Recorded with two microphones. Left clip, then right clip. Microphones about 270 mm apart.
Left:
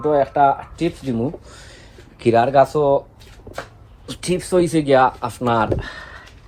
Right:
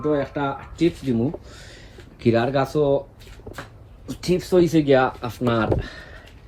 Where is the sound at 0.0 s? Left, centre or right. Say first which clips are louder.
Left 8 dB; centre.